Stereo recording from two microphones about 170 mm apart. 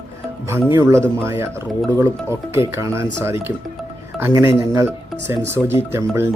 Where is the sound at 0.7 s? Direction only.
15° right (ahead or behind).